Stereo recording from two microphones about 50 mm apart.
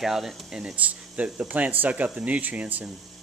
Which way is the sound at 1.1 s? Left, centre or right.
Right.